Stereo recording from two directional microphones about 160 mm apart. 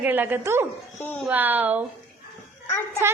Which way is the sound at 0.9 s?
10° left (ahead or behind).